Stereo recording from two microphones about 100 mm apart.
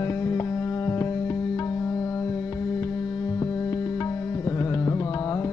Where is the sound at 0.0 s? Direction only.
30° left (ahead or behind).